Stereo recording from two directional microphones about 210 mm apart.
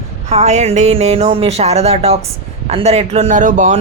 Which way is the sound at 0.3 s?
30° right (ahead or behind).